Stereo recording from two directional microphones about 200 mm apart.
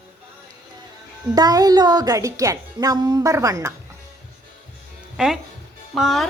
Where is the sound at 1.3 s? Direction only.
20° right (ahead or behind).